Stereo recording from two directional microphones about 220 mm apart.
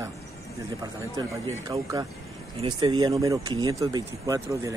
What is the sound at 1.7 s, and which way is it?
Speech, 15° right (ahead or behind).